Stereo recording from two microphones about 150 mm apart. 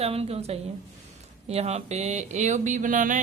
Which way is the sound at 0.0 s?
40° right (ahead or behind).